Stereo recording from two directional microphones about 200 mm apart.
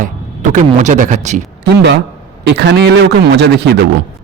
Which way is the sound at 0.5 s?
40° right (ahead or behind).